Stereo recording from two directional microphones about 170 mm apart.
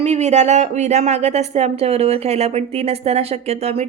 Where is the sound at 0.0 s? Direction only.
40° right (ahead or behind).